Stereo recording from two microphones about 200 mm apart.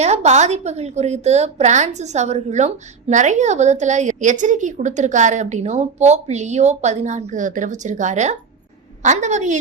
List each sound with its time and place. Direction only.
0.0 s a woman's voice: 35° right (ahead or behind)